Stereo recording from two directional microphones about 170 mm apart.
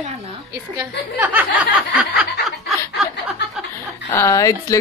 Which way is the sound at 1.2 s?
10° right (ahead or behind).